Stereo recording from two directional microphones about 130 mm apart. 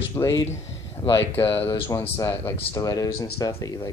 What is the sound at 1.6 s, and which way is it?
Speech, 20° left (ahead or behind).